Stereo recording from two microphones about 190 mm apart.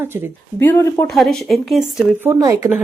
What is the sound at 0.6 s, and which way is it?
Speech, 15° left (ahead or behind).